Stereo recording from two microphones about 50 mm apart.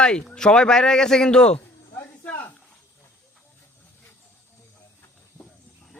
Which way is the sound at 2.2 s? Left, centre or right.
Left.